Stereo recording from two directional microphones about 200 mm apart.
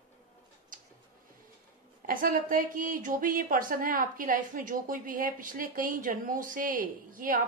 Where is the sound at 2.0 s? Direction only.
45° right (ahead or behind).